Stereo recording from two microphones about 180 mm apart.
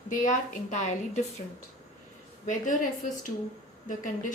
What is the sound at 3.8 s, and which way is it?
Speech, 45° left (ahead or behind).